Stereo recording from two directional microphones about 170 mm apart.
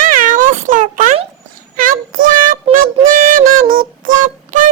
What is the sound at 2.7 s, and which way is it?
Synthetic singing, 55° right (ahead or behind).